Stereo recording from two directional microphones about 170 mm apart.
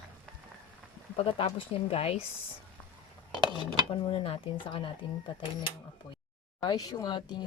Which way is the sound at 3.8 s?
30° left (ahead or behind).